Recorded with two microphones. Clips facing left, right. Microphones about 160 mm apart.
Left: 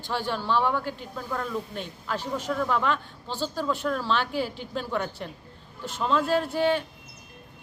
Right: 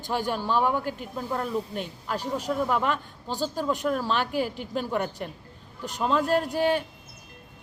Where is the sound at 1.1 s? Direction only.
30° right (ahead or behind).